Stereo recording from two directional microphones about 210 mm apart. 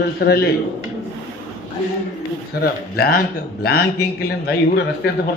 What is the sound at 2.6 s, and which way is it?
A man's voice, 45° left (ahead or behind).